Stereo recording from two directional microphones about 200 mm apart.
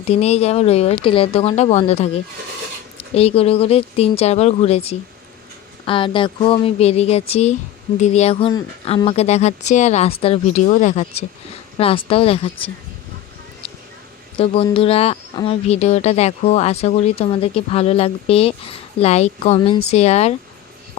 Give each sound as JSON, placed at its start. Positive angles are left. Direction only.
{"t": 0.0, "sound": "speech", "side_deg": 30}
{"t": 13.6, "sound": "a sound", "side_deg": 25}
{"t": 14.3, "sound": "speech", "side_deg": 25}